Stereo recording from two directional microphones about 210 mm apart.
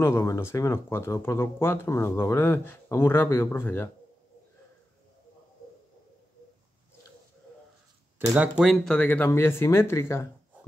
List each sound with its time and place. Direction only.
0.0 s speech: 15° left (ahead or behind)
8.4 s speech: centre (ahead or behind)